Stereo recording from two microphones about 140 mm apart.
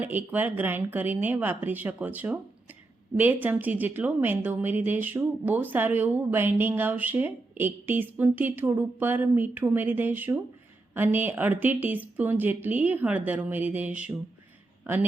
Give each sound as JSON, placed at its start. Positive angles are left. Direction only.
{"t": 0.0, "sound": "a woman's voice", "side_deg": -15}